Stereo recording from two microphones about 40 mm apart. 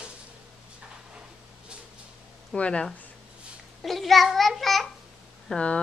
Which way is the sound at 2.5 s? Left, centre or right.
Left.